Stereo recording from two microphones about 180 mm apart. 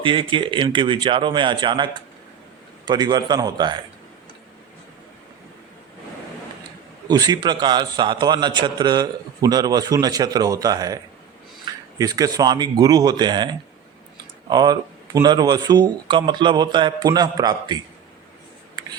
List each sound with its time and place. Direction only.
0.0 s a man's voice: 30° right (ahead or behind)
7.1 s a man's voice: 20° right (ahead or behind)
14.5 s a man's voice: 20° right (ahead or behind)